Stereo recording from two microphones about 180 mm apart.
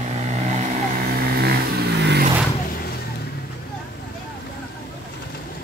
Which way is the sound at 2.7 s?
55° left (ahead or behind).